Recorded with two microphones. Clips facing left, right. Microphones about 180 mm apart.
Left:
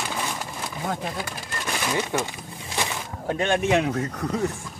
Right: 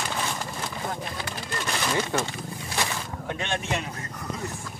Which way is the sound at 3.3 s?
45° left (ahead or behind).